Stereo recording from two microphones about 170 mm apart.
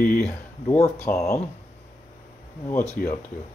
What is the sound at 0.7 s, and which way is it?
Speech, 40° left (ahead or behind).